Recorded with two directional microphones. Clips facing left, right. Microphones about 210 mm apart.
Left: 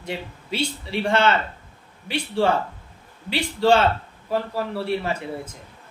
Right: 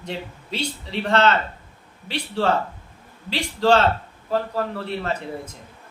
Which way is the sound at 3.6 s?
10° left (ahead or behind).